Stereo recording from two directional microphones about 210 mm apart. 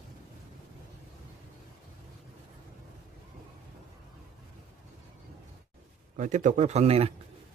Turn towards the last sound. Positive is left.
turn(degrees=-30)  # may be behind; listen again after turning